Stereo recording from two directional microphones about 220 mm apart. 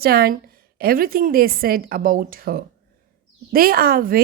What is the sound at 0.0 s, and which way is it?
A woman's voice, 45° right (ahead or behind).